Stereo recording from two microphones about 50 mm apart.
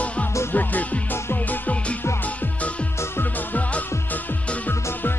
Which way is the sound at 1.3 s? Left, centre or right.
Left.